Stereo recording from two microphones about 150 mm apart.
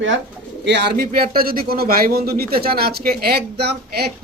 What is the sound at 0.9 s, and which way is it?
Speech, 90° right.